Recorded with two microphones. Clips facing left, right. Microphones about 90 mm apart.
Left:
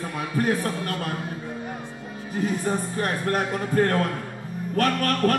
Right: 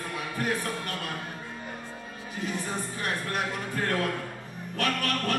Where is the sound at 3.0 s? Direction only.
40° left (ahead or behind).